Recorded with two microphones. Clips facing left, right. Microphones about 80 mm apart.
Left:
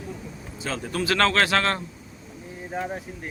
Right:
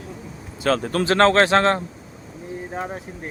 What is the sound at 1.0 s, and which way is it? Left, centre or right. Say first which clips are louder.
Speech: right 5 dB; right.